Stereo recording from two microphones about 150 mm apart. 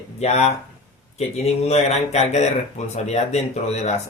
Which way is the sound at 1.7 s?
45° left (ahead or behind).